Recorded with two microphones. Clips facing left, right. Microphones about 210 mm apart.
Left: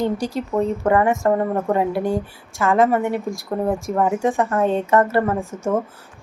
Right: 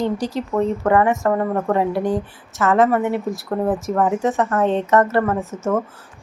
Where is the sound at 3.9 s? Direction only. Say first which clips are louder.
Even; 10° left (ahead or behind).